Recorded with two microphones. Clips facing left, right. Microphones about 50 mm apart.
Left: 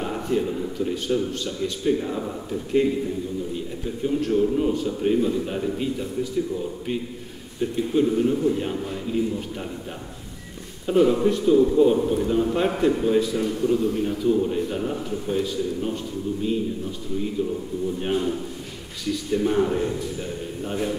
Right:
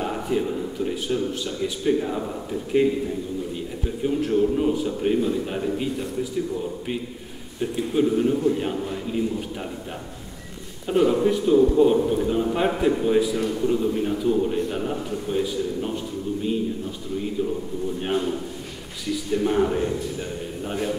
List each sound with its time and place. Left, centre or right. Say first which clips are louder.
0.0 s a man's voice: even; centre
7.7 s a man's voice: even; centre
10.9 s a man's voice: left 1 dB; centre; by 14.1 s right
14.1 s a man's voice: even; centre
17.4 s a man's voice: even; centre